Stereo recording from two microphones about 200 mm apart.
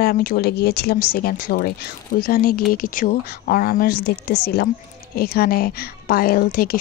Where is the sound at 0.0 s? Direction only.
50° left (ahead or behind).